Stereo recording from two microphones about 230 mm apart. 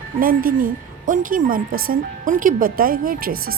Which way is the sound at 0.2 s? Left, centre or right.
Right.